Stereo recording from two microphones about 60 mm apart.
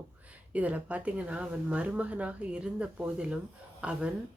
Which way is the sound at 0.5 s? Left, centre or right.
Right.